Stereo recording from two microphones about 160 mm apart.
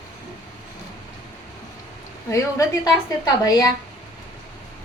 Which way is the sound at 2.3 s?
25° left (ahead or behind).